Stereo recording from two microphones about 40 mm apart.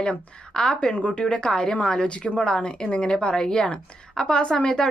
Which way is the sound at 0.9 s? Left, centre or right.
Left.